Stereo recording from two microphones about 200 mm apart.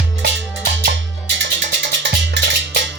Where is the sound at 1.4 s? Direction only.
60° right (ahead or behind).